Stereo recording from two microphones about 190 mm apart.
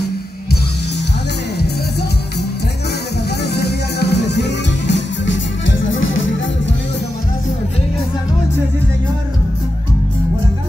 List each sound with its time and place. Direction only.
3.4 s music: 60° left (ahead or behind); by 6.3 s 90° left